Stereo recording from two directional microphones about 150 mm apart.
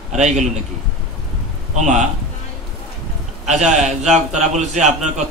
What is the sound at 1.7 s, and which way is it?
Speech, 50° right (ahead or behind).